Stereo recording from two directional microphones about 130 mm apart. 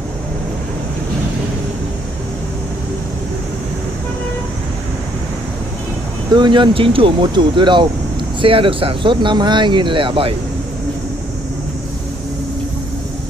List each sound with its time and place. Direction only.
6.3 s speech: 35° right (ahead or behind)